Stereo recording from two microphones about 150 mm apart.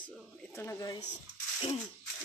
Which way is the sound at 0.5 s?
20° left (ahead or behind).